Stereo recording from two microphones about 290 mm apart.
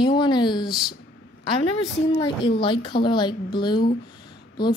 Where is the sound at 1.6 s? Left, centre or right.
Centre.